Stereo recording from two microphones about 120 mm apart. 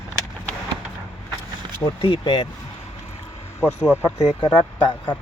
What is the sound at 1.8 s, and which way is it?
Speech, 50° left (ahead or behind).